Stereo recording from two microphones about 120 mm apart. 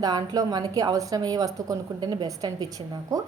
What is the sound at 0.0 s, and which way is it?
Speech, 35° right (ahead or behind).